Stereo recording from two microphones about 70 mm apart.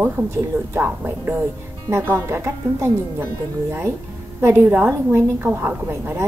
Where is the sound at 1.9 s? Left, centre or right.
Right.